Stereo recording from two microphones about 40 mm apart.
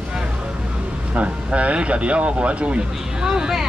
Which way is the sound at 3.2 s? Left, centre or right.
Centre.